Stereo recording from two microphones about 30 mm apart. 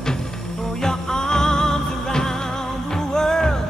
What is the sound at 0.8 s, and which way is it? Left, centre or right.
Music, centre.